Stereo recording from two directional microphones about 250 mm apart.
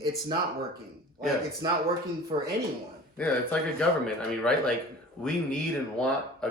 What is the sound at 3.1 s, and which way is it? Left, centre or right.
Speech, centre.